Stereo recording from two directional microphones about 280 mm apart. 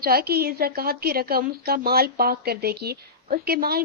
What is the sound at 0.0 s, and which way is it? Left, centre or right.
A woman's voice, right.